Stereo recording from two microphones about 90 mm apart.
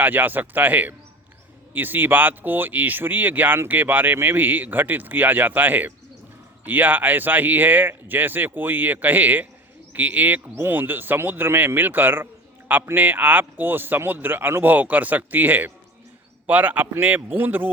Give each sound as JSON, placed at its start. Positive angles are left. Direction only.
{"t": 0.0, "sound": "speech", "side_deg": -20}